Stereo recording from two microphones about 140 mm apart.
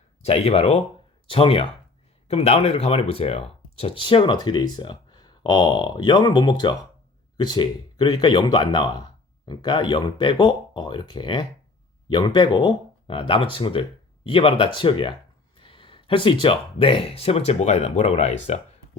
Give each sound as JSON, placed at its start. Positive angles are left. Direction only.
{"t": 0.2, "sound": "speech", "side_deg": 45}